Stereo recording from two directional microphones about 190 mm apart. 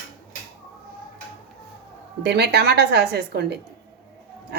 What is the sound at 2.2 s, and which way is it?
A woman's voice, 60° right (ahead or behind).